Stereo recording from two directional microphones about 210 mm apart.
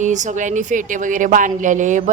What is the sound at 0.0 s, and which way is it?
A woman's voice, 35° right (ahead or behind).